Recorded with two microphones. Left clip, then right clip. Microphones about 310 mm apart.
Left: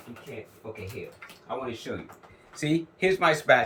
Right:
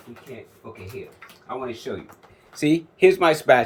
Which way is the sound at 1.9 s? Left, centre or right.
Right.